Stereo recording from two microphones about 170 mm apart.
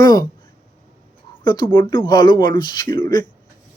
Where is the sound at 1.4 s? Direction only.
25° left (ahead or behind).